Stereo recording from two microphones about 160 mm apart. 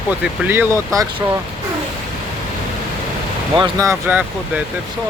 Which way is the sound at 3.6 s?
20° right (ahead or behind).